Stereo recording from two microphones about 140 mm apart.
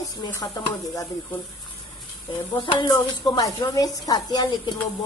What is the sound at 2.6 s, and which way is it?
A woman's voice, 35° left (ahead or behind).